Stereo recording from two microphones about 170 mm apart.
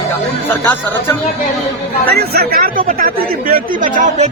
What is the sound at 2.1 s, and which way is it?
Speech, 65° right (ahead or behind).